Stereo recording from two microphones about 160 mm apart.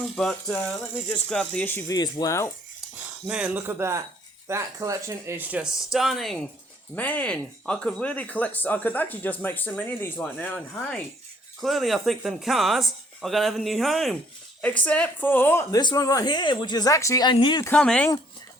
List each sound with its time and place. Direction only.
1.1 s speech: 5° left (ahead or behind)
2.0 s speech: 25° left (ahead or behind)
3.0 s speech: 5° right (ahead or behind)
6.9 s speech: 10° left (ahead or behind)
15.8 s speech: 25° left (ahead or behind)
17.7 s speech: 5° left (ahead or behind)